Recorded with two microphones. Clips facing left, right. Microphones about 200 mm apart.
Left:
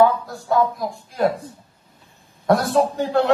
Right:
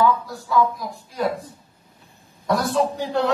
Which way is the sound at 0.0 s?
50° left (ahead or behind).